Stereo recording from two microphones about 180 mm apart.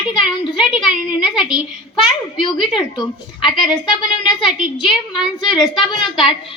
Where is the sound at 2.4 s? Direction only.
30° left (ahead or behind).